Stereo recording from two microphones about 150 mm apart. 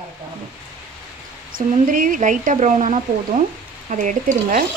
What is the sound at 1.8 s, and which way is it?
Speech, 65° right (ahead or behind).